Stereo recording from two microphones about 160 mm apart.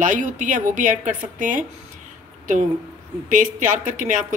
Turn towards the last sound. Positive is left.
turn(degrees=-50)  # may be behind; listen again after turning